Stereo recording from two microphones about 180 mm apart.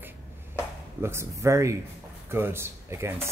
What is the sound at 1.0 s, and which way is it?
Speech, 15° right (ahead or behind).